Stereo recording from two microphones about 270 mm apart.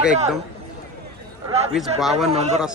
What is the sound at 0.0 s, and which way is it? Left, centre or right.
Speech, centre.